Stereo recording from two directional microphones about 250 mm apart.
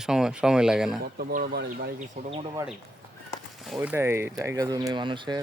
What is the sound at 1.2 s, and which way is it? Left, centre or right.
Speech, right.